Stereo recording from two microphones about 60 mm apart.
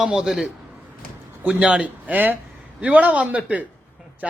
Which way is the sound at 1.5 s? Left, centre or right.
Right.